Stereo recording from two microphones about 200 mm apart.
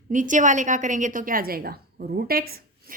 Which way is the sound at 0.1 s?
40° right (ahead or behind).